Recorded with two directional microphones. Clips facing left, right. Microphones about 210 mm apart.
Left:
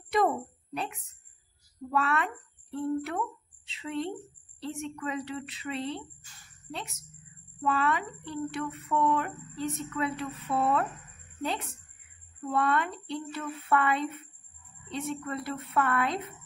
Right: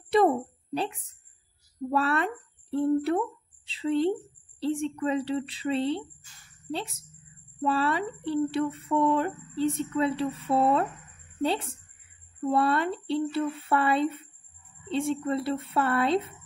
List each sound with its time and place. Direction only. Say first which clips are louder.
1.9 s a woman's voice: right 3 dB; 35° right (ahead or behind)